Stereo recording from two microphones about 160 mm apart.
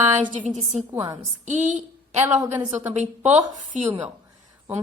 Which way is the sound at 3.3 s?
50° right (ahead or behind).